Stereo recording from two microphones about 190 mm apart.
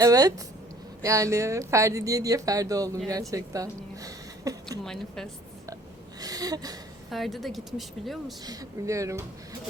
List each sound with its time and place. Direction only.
0.0 s speech: 20° right (ahead or behind)
4.0 s a sound: 20° right (ahead or behind)
4.8 s speech: centre (ahead or behind)
6.1 s a sound: 20° right (ahead or behind)
7.1 s speech: centre (ahead or behind)
8.4 s speech: 15° right (ahead or behind)